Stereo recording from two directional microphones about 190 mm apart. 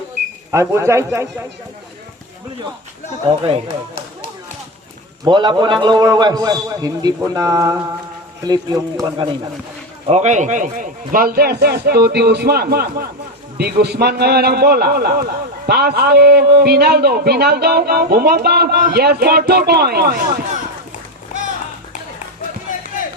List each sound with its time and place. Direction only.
0.5 s speech: 15° right (ahead or behind)
3.2 s speech: 30° right (ahead or behind)
5.2 s a man's voice: 25° right (ahead or behind)
10.1 s a man's voice: 40° right (ahead or behind); by 20.4 s 55° right (ahead or behind)